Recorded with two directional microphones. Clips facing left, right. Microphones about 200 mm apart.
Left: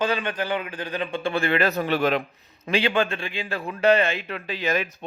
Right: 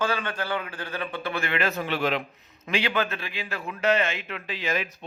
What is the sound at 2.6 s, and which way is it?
A man's voice, 30° left (ahead or behind).